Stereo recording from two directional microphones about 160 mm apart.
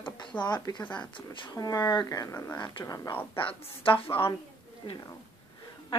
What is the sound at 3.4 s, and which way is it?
A woman's voice, 35° left (ahead or behind).